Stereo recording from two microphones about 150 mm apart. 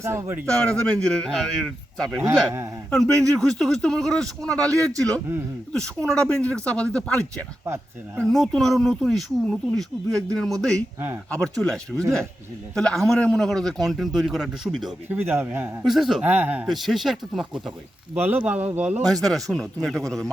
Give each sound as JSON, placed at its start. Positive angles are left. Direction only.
{"t": 0.0, "sound": "speech", "side_deg": -15}
{"t": 0.6, "sound": "a man's voice", "side_deg": 10}
{"t": 7.6, "sound": "speech", "side_deg": -15}
{"t": 8.2, "sound": "a man's voice", "side_deg": 0}
{"t": 10.8, "sound": "speech", "side_deg": -15}
{"t": 11.3, "sound": "a man's voice", "side_deg": 5}
{"t": 15.1, "sound": "speech", "side_deg": -15}
{"t": 15.8, "sound": "a man's voice", "side_deg": 0}
{"t": 19.3, "sound": "a man's voice", "side_deg": 0}